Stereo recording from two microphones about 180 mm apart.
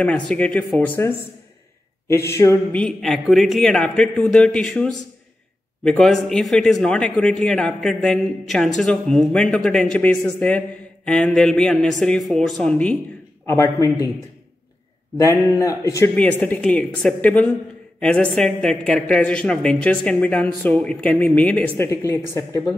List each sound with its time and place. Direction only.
0.0 s a woman's voice: 5° left (ahead or behind)
2.8 s speech: centre (ahead or behind)
5.9 s speech: 5° left (ahead or behind)
13.5 s a woman's voice: 15° left (ahead or behind)
15.1 s a woman's voice: 15° left (ahead or behind)